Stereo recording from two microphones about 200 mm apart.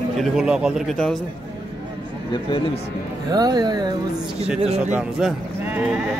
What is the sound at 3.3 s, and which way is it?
Speech, 20° right (ahead or behind).